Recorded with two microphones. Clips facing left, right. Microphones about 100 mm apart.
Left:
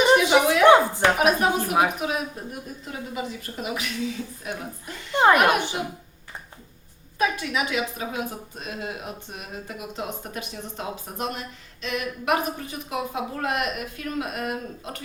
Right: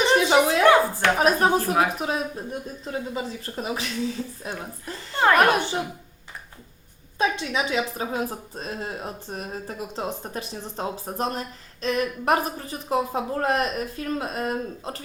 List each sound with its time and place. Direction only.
0.6 s a sound: 20° left (ahead or behind)
1.2 s speech: 35° right (ahead or behind)
5.1 s speech: 15° left (ahead or behind)
7.2 s speech: 25° right (ahead or behind)